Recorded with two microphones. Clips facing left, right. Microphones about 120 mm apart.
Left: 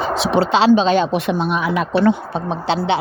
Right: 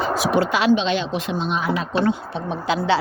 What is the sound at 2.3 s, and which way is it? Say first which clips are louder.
Speech: left 3 dB; 35° left (ahead or behind).